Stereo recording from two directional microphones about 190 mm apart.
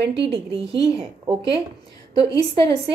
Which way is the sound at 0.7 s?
30° right (ahead or behind).